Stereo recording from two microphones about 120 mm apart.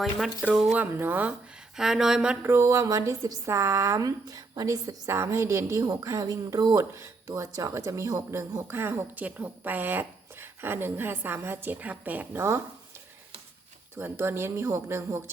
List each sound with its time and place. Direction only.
0.0 s speech: centre (ahead or behind)
0.8 s speech: 15° right (ahead or behind)
1.7 s speech: 5° right (ahead or behind)
2.5 s speech: 20° right (ahead or behind)
13.9 s speech: 20° right (ahead or behind)